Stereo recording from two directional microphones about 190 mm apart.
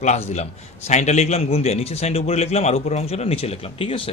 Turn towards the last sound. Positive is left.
turn(degrees=30)  # may be behind; listen again after turning